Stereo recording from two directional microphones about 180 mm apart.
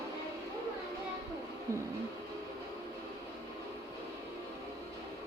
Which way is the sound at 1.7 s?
15° right (ahead or behind).